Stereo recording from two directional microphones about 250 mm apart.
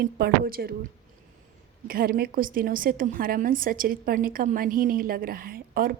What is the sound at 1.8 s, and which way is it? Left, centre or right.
A woman's voice, right.